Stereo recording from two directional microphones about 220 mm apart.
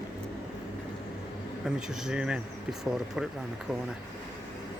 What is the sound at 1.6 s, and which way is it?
Speech, centre (ahead or behind).